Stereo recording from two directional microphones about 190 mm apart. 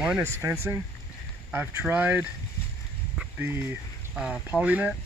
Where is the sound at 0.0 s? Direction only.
10° right (ahead or behind).